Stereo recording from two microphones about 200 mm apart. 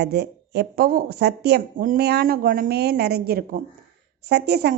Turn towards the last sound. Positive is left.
turn(degrees=-55)  # may be behind; listen again after turning